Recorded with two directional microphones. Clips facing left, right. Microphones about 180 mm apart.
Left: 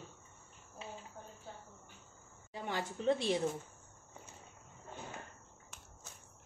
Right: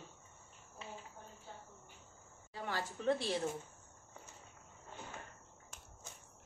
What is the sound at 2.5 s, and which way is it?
Speech, 20° left (ahead or behind).